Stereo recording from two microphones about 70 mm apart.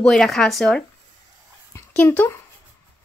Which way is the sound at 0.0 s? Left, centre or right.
Centre.